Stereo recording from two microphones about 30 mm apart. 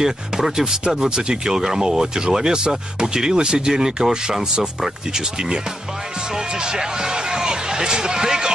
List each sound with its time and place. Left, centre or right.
0.0 s speech: centre
0.9 s speech: right